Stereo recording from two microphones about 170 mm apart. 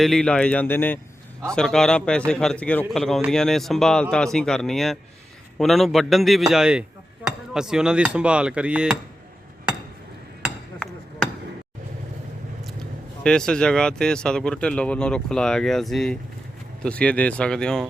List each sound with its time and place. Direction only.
0.0 s speech: 5° left (ahead or behind)
10.4 s hammer: 5° left (ahead or behind)
13.2 s speech: 5° left (ahead or behind)